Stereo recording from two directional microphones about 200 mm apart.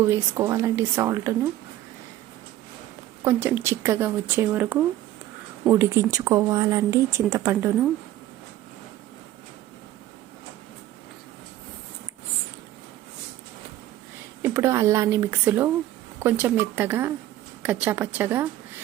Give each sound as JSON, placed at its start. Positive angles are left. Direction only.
{"t": 0.0, "sound": "speech", "side_deg": -15}
{"t": 3.2, "sound": "speech", "side_deg": -10}
{"t": 14.4, "sound": "speech", "side_deg": -10}